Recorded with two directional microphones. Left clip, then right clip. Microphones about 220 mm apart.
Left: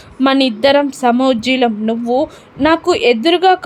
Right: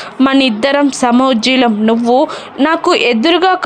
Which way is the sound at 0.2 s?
10° right (ahead or behind).